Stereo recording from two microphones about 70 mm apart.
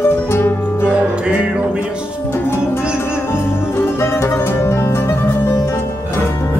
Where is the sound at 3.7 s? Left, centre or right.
Left.